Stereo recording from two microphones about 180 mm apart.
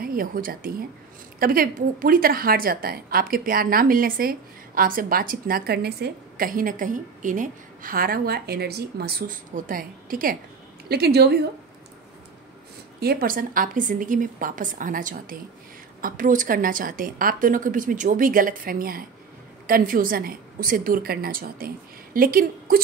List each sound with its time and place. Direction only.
0.0 s a woman's voice: 50° right (ahead or behind)
10.9 s a woman's voice: 60° right (ahead or behind)
13.0 s a woman's voice: 55° right (ahead or behind)